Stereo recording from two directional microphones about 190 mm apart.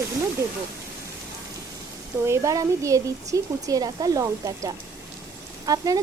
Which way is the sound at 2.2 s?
15° right (ahead or behind).